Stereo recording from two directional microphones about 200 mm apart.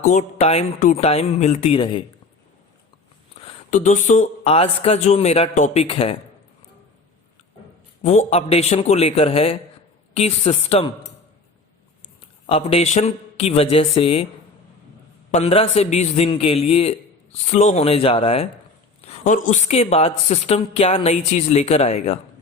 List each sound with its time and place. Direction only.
0.0 s speech: 35° left (ahead or behind)
3.7 s speech: 40° left (ahead or behind)
8.0 s speech: 35° left (ahead or behind)
12.5 s speech: 30° left (ahead or behind)
15.3 s speech: 30° left (ahead or behind)